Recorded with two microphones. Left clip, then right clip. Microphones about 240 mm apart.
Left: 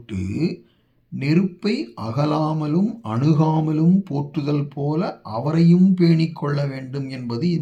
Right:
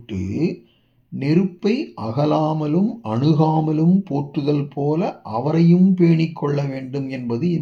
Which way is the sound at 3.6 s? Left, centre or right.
Left.